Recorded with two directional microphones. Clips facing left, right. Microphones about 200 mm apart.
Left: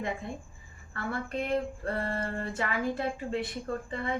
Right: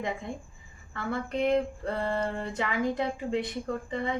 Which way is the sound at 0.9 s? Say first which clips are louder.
Right 3 dB; 20° right (ahead or behind).